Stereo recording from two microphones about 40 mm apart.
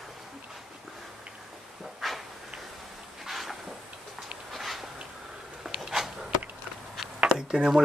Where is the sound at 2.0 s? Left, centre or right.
Centre.